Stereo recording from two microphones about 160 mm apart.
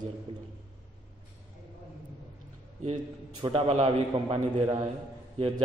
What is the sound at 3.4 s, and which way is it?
A man's voice, 30° right (ahead or behind).